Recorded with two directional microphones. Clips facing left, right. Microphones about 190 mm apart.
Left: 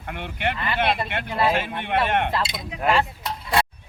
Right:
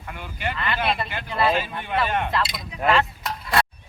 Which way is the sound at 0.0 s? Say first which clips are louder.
Left 3 dB; 70° left (ahead or behind).